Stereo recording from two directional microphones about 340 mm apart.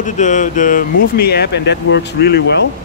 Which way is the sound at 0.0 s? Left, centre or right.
Left.